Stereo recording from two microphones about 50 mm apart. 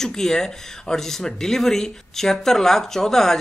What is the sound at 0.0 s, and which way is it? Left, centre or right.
Speech, centre.